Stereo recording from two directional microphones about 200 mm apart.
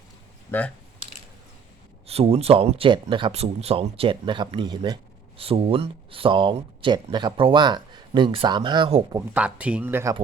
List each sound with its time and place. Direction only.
0.5 s speech: 10° left (ahead or behind)
2.0 s speech: 30° right (ahead or behind)
9.1 s speech: 5° right (ahead or behind)